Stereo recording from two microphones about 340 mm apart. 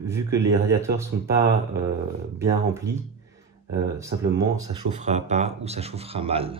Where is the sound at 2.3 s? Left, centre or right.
Centre.